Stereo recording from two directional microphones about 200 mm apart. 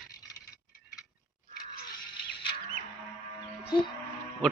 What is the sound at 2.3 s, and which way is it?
Music, 25° left (ahead or behind).